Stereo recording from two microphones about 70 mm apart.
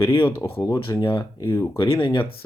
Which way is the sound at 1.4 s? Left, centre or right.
Left.